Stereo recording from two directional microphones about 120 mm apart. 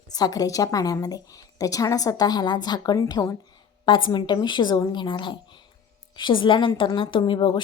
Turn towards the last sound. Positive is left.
turn(degrees=40)  # may be behind; listen again after turning